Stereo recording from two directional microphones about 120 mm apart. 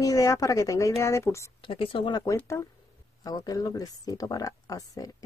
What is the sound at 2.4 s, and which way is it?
Speech, 25° left (ahead or behind).